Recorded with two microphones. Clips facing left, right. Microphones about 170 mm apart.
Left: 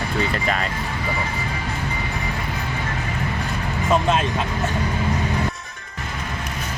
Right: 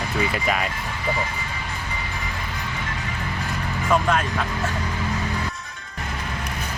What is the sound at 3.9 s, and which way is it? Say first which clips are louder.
Speech: left 1 dB; 25° left (ahead or behind).